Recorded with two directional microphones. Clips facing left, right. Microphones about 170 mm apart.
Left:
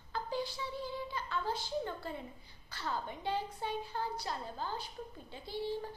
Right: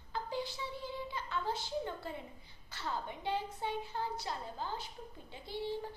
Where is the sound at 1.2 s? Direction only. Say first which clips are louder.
Right 1 dB; 20° right (ahead or behind).